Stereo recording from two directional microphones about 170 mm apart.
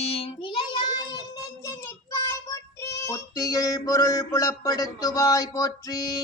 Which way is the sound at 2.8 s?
20° left (ahead or behind).